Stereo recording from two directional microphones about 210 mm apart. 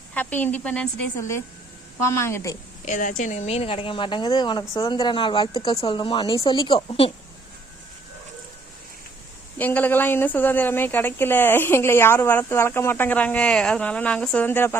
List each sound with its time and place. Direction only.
0.1 s speech: 10° left (ahead or behind)
2.8 s a woman's voice: 40° left (ahead or behind)
9.6 s speech: 10° left (ahead or behind)